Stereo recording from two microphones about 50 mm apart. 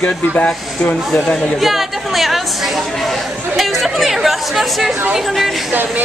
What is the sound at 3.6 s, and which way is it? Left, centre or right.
Speech, centre.